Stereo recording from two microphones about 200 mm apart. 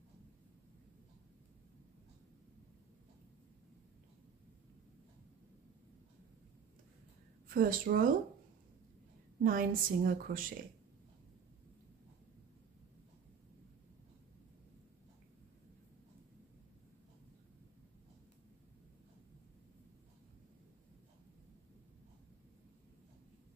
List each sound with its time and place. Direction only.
7.4 s a woman's voice: 45° right (ahead or behind)
9.4 s a woman's voice: 45° right (ahead or behind)